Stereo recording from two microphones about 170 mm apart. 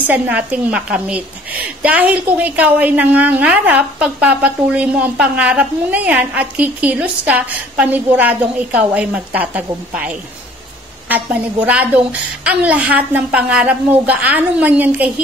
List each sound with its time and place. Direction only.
0.0 s a woman's voice: 10° right (ahead or behind)